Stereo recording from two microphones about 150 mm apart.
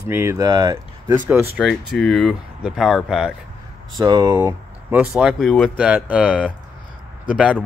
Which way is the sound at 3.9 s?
25° right (ahead or behind).